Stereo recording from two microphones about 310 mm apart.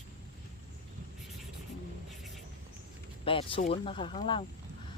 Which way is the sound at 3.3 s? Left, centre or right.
Centre.